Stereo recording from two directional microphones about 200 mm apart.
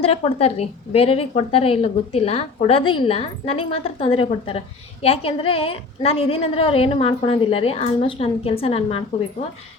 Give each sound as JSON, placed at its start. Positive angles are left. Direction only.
{"t": 0.0, "sound": "a woman's voice", "side_deg": 30}